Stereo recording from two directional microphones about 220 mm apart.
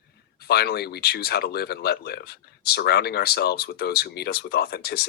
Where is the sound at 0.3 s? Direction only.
45° left (ahead or behind).